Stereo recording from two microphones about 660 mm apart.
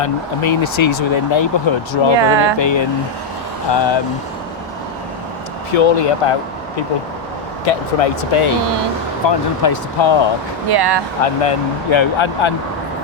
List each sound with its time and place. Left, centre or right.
0.0 s speech: left
2.1 s speech: right
2.6 s speech: left
5.7 s speech: left
7.6 s speech: left
9.2 s speech: left
10.7 s speech: right
11.2 s speech: left